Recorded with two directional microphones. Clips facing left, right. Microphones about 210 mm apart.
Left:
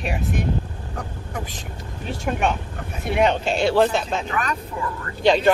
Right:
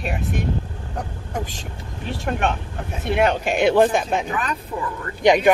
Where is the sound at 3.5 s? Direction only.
15° right (ahead or behind).